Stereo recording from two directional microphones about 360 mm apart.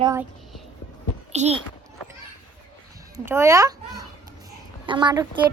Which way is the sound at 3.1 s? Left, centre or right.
Centre.